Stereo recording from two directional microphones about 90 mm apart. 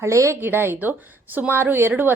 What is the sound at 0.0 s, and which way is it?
A woman's voice, 35° right (ahead or behind).